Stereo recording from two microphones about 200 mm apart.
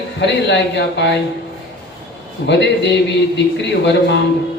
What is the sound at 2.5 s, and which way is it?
A man's voice, 60° left (ahead or behind).